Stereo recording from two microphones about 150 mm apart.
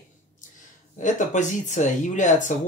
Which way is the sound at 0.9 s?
55° left (ahead or behind).